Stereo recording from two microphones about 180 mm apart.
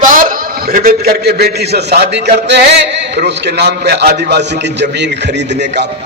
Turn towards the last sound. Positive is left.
turn(degrees=-70)  # may be behind; listen again after turning